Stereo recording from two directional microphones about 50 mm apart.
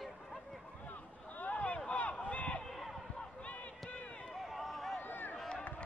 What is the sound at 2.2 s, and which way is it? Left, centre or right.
Run, left.